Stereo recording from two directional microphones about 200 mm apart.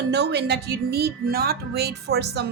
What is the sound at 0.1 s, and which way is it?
A woman's voice, 55° right (ahead or behind).